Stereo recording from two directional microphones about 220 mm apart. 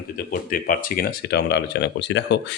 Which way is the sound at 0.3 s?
40° left (ahead or behind).